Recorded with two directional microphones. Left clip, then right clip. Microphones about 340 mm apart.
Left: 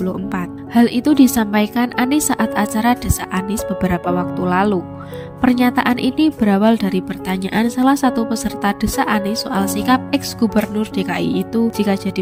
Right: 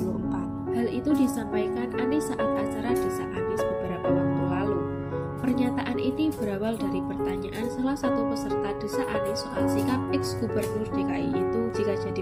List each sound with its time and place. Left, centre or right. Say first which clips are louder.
0.7 s speech: left 11 dB; left